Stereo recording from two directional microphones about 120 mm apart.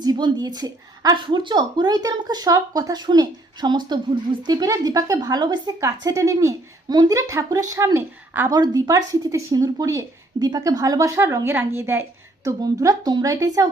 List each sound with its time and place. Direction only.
0.0 s a woman's voice: 35° right (ahead or behind); by 8.4 s 20° right (ahead or behind)
8.4 s a woman's voice: 35° right (ahead or behind)
12.5 s a woman's voice: 30° right (ahead or behind)